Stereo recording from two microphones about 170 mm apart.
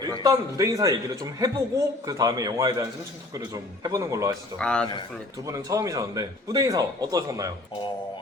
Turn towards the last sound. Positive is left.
turn(degrees=-20)  # may be behind; listen again after turning